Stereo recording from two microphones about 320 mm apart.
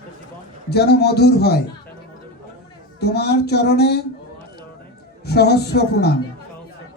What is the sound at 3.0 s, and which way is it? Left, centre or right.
Speech, left.